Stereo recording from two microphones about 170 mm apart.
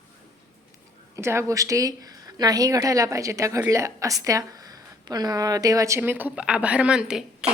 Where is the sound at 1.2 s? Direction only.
15° right (ahead or behind).